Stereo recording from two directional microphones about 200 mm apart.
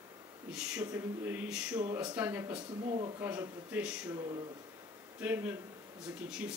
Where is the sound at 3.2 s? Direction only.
10° right (ahead or behind).